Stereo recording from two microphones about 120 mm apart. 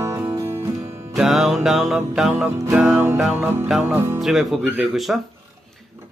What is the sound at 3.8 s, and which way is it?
Music, 20° right (ahead or behind).